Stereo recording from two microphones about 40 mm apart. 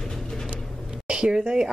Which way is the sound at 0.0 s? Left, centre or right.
Centre.